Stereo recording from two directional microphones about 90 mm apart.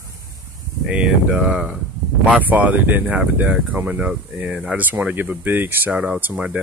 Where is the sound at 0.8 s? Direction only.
10° right (ahead or behind).